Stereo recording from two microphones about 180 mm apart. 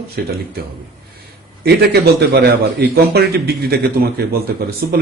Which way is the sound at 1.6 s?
65° right (ahead or behind).